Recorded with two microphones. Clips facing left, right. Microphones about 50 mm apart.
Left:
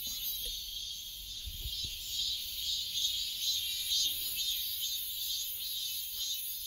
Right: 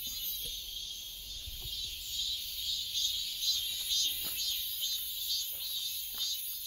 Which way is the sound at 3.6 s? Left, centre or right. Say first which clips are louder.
Even; centre.